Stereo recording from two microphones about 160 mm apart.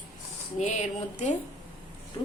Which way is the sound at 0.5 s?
45° left (ahead or behind).